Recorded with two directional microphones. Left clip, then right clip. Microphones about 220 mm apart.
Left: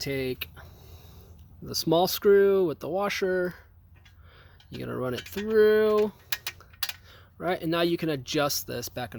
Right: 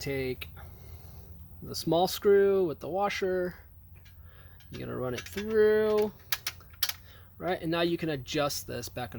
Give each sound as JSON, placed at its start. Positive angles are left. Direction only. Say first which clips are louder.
{"t": 0.0, "sound": "speech", "louder": "left 3 dB", "side_deg": 30}
{"t": 4.7, "sound": "speech", "louder": "left 3 dB", "side_deg": 25}